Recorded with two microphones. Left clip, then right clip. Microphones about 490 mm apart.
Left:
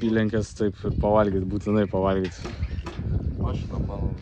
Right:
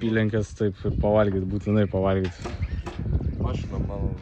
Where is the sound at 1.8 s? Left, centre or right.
Centre.